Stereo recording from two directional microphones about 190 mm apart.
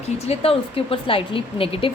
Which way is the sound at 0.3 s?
30° left (ahead or behind).